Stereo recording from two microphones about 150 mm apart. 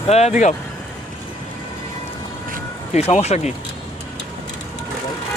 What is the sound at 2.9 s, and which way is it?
Speech, 45° left (ahead or behind).